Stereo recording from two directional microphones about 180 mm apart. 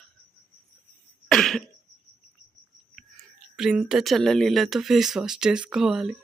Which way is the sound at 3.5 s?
5° right (ahead or behind).